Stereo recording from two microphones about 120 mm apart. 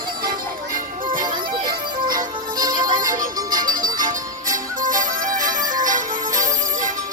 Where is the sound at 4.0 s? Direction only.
90° right.